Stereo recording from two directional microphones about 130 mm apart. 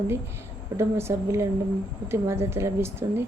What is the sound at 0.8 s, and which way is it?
A woman's voice, 20° right (ahead or behind).